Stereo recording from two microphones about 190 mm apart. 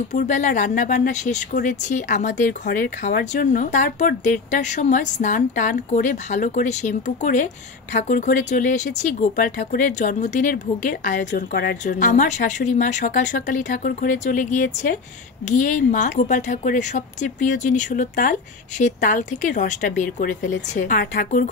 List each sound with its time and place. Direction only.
0.3 s speech: 40° left (ahead or behind)